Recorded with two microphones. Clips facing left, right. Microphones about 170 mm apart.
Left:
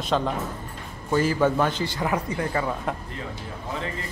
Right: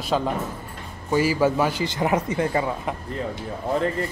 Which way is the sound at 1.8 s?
20° right (ahead or behind).